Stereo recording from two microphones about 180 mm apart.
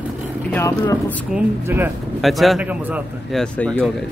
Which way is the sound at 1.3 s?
10° right (ahead or behind).